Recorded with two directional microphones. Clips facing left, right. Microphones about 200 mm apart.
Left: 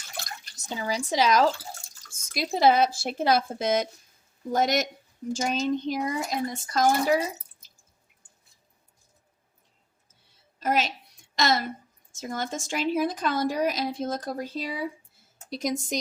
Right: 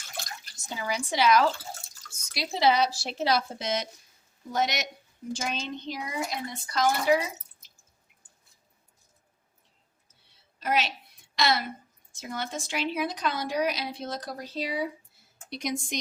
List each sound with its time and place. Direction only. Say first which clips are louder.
0.5 s a woman's voice: left 2 dB; 35° left (ahead or behind)
10.6 s a woman's voice: left 2 dB; 45° left (ahead or behind)